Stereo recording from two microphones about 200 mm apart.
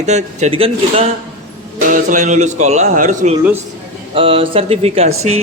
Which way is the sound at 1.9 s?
40° right (ahead or behind).